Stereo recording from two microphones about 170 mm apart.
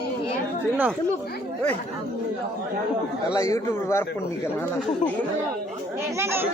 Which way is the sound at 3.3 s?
20° left (ahead or behind).